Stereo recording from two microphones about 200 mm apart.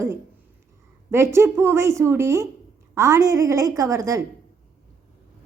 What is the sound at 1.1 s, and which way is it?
A woman's voice, 15° right (ahead or behind).